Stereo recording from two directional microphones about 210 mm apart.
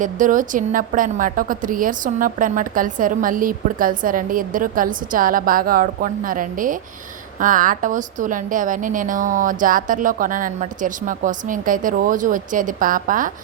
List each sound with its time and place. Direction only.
0.0 s a woman's voice: 40° right (ahead or behind)